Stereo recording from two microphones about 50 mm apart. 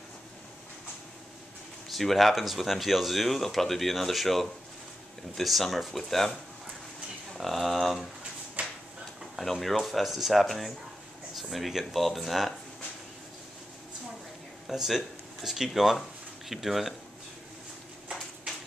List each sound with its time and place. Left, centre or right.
1.9 s speech: centre
7.3 s speech: centre
8.6 s a sound: right
9.4 s speech: centre
14.7 s speech: centre